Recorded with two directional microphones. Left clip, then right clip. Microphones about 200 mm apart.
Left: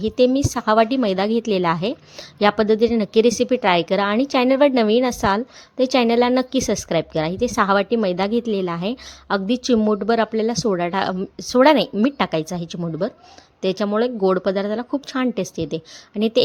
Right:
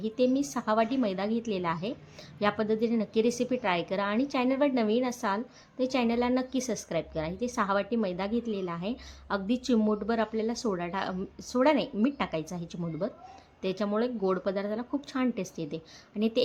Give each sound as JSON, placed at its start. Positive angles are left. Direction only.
{"t": 0.0, "sound": "speech", "side_deg": 40}